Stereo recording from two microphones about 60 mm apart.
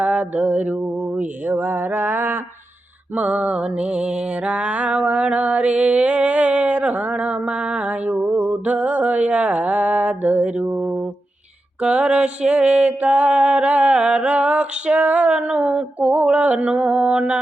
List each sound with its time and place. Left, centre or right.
0.0 s mantra: centre
3.2 s music: centre
11.8 s music: centre